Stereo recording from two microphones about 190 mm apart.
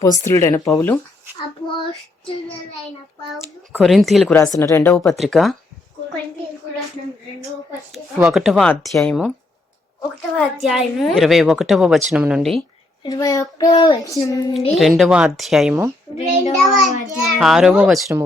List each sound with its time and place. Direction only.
0.3 s speech: 15° left (ahead or behind)
1.6 s child singing: 25° left (ahead or behind)
3.8 s a woman's voice: centre (ahead or behind)
4.5 s speech: 15° left (ahead or behind)
4.9 s a woman's voice: centre (ahead or behind)
7.9 s a woman's voice: centre (ahead or behind)
10.3 s a woman's voice: centre (ahead or behind)
13.0 s child singing: 20° left (ahead or behind)
14.7 s a woman's voice: centre (ahead or behind)
16.1 s child singing: 35° left (ahead or behind)
16.6 s a woman's voice: centre (ahead or behind)